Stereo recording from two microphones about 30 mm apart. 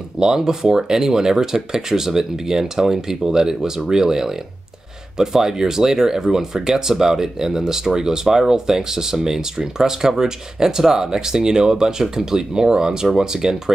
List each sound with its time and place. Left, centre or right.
0.2 s speech: centre